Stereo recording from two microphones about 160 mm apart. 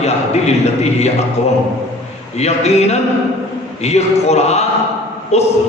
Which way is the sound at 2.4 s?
45° left (ahead or behind).